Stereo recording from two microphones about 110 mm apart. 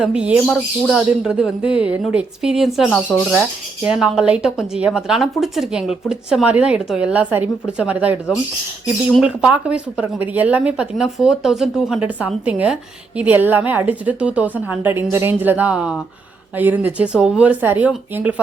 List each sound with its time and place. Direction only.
0.0 s a woman's voice: 10° right (ahead or behind)
3.1 s speech: 10° left (ahead or behind)
3.8 s speech: 5° right (ahead or behind)
9.2 s speech: 10° right (ahead or behind)